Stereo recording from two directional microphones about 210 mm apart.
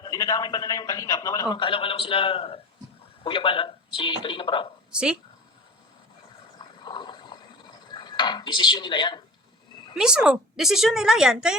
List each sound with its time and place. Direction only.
0.0 s a man's voice: 15° left (ahead or behind)
4.9 s speech: 5° right (ahead or behind)
6.8 s a sound: 20° left (ahead or behind)
7.9 s speech: 20° left (ahead or behind)
9.9 s a woman's voice: 5° right (ahead or behind)